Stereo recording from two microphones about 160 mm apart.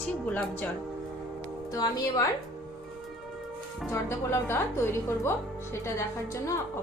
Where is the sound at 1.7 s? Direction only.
25° left (ahead or behind).